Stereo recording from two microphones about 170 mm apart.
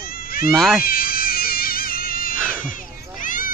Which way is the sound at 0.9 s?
60° left (ahead or behind).